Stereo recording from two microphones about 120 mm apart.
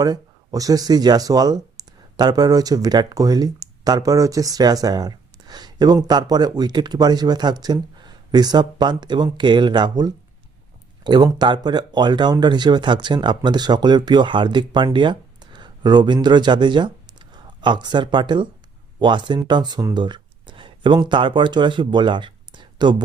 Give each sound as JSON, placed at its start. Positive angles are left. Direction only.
{"t": 0.0, "sound": "speech", "side_deg": -30}